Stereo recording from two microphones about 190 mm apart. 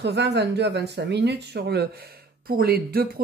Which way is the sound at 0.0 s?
60° right (ahead or behind).